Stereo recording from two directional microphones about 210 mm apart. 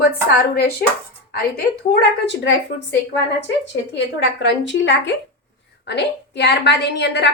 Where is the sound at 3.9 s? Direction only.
60° left (ahead or behind).